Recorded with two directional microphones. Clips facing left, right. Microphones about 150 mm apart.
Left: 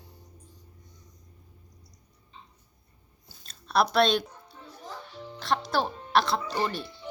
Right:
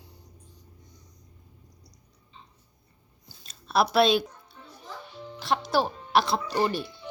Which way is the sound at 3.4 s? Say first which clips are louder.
Right 1 dB; 5° right (ahead or behind).